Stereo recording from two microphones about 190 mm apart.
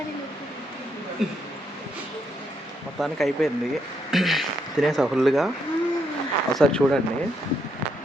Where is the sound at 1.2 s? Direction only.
5° right (ahead or behind).